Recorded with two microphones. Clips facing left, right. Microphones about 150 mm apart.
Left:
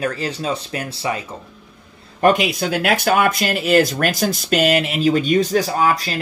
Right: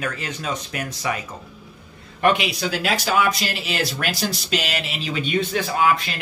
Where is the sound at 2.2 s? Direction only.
40° left (ahead or behind).